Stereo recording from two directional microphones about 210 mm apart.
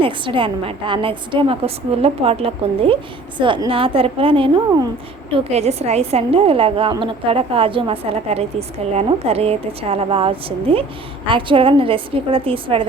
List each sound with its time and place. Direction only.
0.0 s a woman's voice: 25° right (ahead or behind)